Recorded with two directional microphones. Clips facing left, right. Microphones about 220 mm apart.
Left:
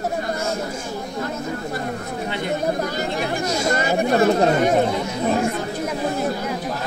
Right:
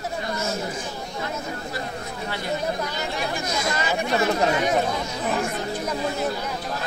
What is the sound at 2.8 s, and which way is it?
Chatter, 50° left (ahead or behind).